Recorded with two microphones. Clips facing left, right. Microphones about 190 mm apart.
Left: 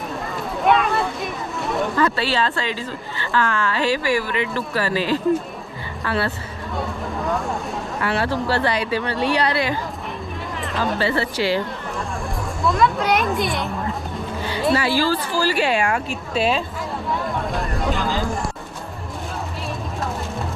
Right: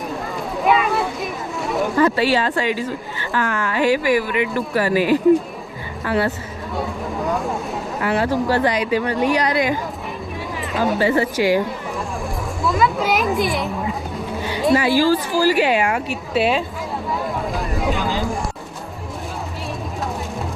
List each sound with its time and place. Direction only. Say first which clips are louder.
0.6 s a sound: even; centre (ahead or behind)
2.0 s a woman's voice: right 5 dB; 15° right (ahead or behind)
7.3 s speech: right 1 dB; centre (ahead or behind)
8.0 s a woman's voice: right 3 dB; 15° right (ahead or behind)
10.9 s a woman's voice: right 5 dB; 15° right (ahead or behind)
12.6 s speech: even; centre (ahead or behind)
14.4 s a woman's voice: right 3 dB; 15° right (ahead or behind)
17.1 s a sound: even; centre (ahead or behind)